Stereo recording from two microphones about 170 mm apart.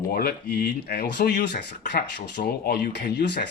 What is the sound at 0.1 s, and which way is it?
Speech, 65° left (ahead or behind).